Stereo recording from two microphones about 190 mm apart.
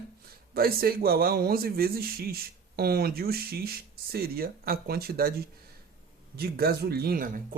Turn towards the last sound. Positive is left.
turn(degrees=-50)  # may be behind; listen again after turning